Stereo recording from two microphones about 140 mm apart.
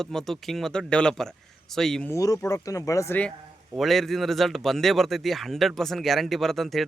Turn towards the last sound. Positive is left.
turn(degrees=0)  # may be behind; listen again after turning